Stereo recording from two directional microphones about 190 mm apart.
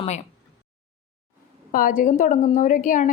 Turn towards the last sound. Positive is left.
turn(degrees=40)  # may be behind; listen again after turning